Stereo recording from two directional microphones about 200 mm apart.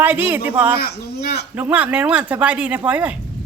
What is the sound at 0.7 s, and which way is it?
Speech, 50° left (ahead or behind).